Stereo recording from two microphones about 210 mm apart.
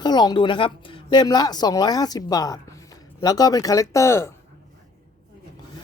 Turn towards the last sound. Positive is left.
turn(degrees=15)  # may be behind; listen again after turning